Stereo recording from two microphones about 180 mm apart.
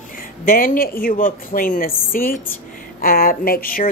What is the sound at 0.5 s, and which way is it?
Speech, 50° left (ahead or behind).